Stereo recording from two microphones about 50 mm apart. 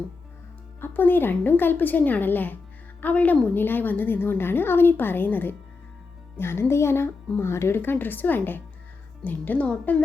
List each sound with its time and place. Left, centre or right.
0.8 s a woman's voice: left
7.8 s a woman's voice: left